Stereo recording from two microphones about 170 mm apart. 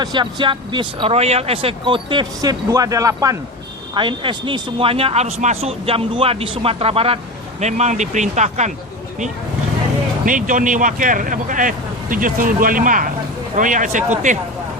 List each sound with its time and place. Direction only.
0.0 s speech: 25° right (ahead or behind); by 8.7 s 45° right (ahead or behind)
10.2 s speech: 50° right (ahead or behind)